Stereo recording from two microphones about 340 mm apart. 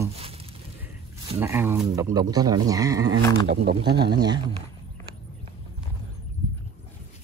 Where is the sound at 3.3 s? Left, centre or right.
Right.